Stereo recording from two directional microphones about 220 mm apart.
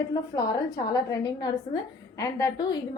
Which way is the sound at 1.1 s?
20° left (ahead or behind).